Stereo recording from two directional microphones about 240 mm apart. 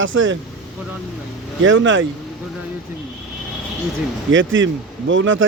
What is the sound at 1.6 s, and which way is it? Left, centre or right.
Speech, right.